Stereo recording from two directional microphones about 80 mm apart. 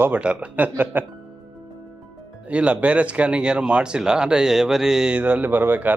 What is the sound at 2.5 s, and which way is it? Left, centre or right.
Speech, centre.